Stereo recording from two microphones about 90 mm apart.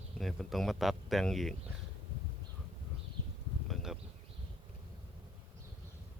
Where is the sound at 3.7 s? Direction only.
5° right (ahead or behind).